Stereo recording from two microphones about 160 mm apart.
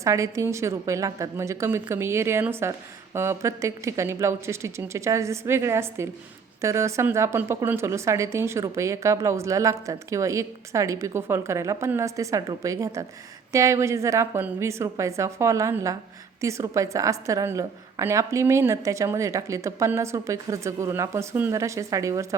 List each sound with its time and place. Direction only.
0.0 s a woman's voice: 20° right (ahead or behind)